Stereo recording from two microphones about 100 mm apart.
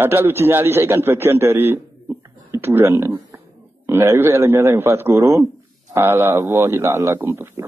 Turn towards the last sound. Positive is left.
turn(degrees=-25)  # may be behind; listen again after turning